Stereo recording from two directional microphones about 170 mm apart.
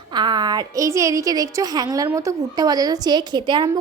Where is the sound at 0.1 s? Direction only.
25° right (ahead or behind).